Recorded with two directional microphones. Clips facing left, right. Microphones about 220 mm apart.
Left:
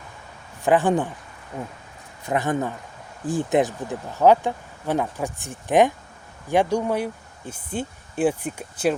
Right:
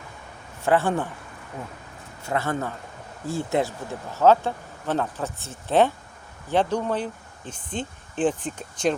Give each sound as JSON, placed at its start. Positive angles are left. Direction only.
{"t": 0.6, "sound": "speech", "side_deg": 15}
{"t": 2.2, "sound": "speech", "side_deg": 15}